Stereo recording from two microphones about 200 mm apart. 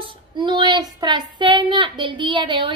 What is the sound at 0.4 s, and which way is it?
A child's voice, 20° right (ahead or behind).